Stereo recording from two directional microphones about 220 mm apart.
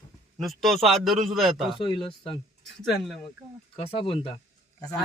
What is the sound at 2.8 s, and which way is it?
Speech, centre (ahead or behind).